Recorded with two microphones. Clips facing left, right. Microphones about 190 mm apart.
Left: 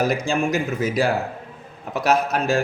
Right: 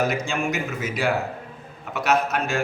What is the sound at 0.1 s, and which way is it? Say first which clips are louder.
Speech: left 4 dB; 35° left (ahead or behind).